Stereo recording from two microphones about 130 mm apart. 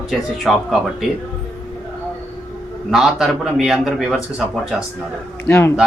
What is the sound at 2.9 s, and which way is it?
Speech, centre (ahead or behind).